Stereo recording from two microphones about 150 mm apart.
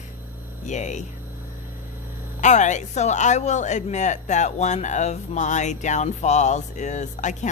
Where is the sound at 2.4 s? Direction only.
55° left (ahead or behind).